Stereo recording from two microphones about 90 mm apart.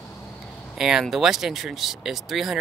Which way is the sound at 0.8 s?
5° right (ahead or behind).